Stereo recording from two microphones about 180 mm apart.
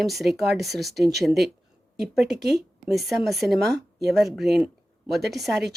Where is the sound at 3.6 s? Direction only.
65° right (ahead or behind).